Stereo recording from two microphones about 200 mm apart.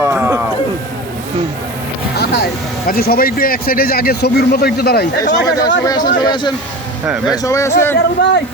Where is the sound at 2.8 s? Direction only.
50° left (ahead or behind).